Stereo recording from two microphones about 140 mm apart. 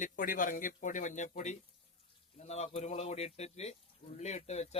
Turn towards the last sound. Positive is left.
turn(degrees=50)  # may be behind; listen again after turning